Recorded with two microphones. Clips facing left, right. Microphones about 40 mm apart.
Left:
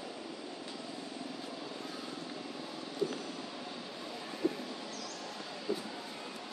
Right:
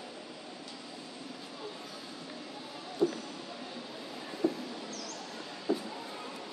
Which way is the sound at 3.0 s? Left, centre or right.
Right.